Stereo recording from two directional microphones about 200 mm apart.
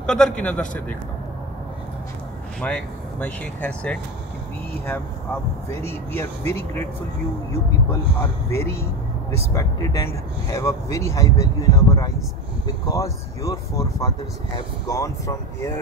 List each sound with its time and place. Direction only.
0.0 s a man's voice: 5° left (ahead or behind)
2.6 s speech: 5° left (ahead or behind)
5.8 s speech: 10° left (ahead or behind)
7.9 s speech: 15° left (ahead or behind)